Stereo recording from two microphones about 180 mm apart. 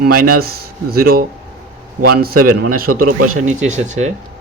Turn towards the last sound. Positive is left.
turn(degrees=-40)  # may be behind; listen again after turning